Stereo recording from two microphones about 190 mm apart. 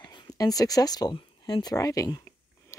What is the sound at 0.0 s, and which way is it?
Speech, 20° left (ahead or behind).